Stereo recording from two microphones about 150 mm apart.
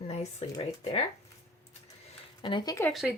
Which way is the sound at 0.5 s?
45° left (ahead or behind).